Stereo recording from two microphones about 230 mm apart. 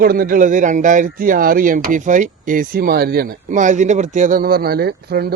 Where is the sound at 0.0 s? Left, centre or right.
Right.